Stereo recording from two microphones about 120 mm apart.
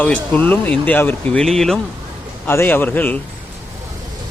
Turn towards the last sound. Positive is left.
turn(degrees=15)  # may be behind; listen again after turning